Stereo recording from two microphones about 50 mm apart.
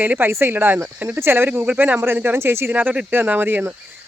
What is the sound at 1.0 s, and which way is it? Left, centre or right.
Speech, right.